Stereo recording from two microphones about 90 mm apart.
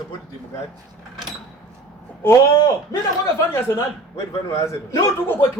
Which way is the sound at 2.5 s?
45° left (ahead or behind).